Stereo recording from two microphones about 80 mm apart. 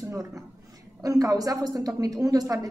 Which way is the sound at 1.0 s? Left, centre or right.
Right.